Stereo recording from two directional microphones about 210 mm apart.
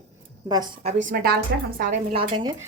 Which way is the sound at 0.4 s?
20° right (ahead or behind).